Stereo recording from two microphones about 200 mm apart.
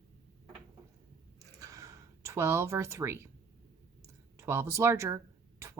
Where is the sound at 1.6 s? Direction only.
15° right (ahead or behind).